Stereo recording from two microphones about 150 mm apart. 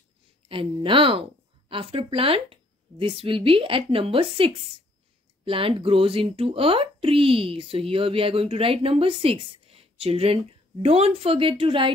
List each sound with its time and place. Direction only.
0.5 s speech: 35° right (ahead or behind)